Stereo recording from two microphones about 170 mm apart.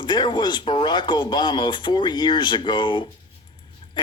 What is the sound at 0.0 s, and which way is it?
Speech, 25° left (ahead or behind).